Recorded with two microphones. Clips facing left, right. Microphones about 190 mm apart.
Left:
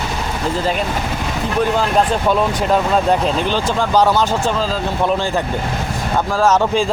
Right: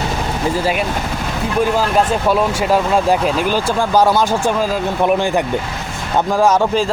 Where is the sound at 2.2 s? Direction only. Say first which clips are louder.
Right 1 dB; 5° right (ahead or behind).